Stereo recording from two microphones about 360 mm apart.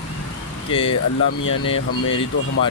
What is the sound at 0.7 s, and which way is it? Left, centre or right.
Speech, centre.